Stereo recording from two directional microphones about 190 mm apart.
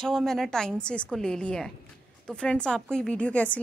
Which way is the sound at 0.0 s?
Centre (ahead or behind).